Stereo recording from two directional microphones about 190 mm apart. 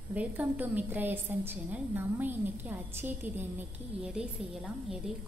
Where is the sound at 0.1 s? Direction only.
10° right (ahead or behind).